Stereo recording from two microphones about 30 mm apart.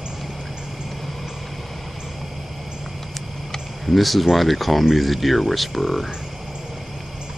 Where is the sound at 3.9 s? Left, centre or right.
Centre.